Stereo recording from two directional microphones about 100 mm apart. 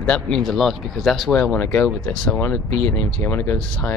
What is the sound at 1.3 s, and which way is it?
Speech, 15° left (ahead or behind).